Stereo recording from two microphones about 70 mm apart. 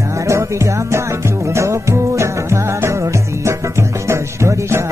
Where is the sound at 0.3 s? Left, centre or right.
Right.